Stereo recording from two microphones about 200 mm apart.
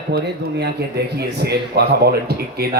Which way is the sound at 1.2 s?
55° right (ahead or behind).